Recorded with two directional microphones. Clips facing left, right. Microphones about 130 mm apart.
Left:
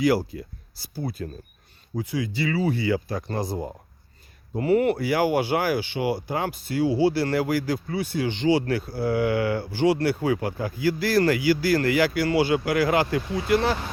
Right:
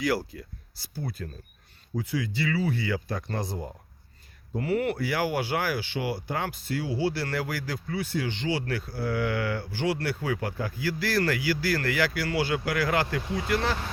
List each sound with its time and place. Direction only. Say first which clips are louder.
0.0 s speech: left 6 dB; 15° left (ahead or behind)
2.0 s speech: left 2 dB; 15° left (ahead or behind)
4.6 s speech: left 6 dB; 20° left (ahead or behind)